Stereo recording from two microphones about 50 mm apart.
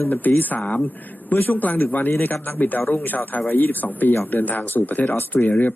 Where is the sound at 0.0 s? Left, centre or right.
Left.